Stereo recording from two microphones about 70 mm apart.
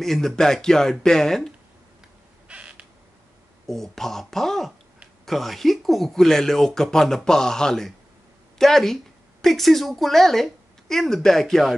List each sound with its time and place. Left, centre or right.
0.0 s speech: centre
2.4 s a sound: centre
3.6 s a woman's voice: centre